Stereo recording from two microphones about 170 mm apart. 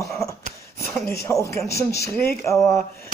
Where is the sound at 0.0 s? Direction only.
20° left (ahead or behind).